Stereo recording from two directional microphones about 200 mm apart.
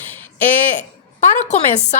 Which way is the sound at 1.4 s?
35° left (ahead or behind).